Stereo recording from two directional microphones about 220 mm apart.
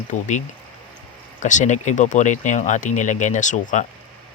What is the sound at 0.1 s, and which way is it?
Speech, 35° left (ahead or behind).